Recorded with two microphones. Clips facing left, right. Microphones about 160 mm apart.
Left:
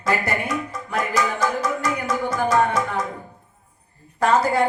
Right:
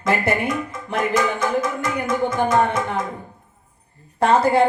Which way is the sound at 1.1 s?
55° right (ahead or behind).